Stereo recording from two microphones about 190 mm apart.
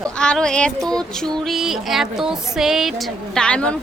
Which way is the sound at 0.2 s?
5° left (ahead or behind).